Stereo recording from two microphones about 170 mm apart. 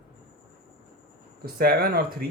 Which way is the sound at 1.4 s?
60° right (ahead or behind).